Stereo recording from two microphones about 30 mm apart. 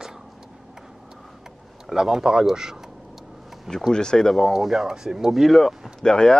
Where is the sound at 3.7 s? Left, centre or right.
Centre.